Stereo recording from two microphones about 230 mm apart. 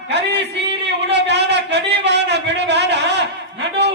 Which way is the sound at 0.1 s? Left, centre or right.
Right.